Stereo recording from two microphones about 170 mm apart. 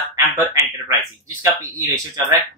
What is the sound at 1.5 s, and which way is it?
Speech, 15° right (ahead or behind).